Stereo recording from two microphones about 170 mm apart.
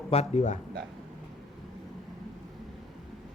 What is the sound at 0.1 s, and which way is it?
Speech, 40° left (ahead or behind).